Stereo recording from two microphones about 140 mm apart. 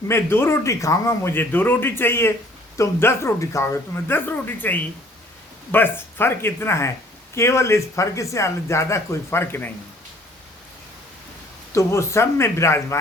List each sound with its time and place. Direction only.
0.1 s a man's voice: 15° left (ahead or behind)
11.7 s speech: 20° left (ahead or behind)